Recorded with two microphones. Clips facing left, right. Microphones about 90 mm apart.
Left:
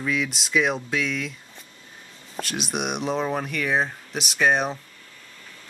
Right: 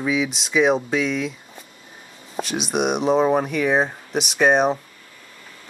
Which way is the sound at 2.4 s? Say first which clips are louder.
Right 6 dB; centre (ahead or behind).